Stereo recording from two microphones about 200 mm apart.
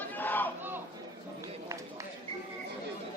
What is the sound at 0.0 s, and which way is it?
Battle cry, 10° left (ahead or behind).